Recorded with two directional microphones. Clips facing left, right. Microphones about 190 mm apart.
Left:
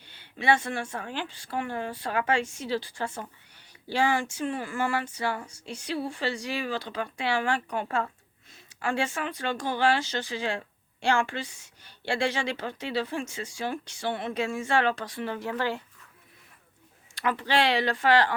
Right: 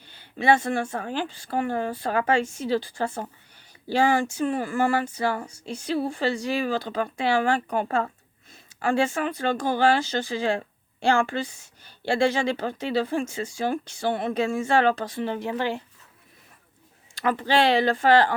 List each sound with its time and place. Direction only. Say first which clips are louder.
0.2 s speech: right 4 dB; 40° right (ahead or behind)
15.1 s speech: right 4 dB; 25° right (ahead or behind)
17.2 s speech: right 4 dB; 35° right (ahead or behind)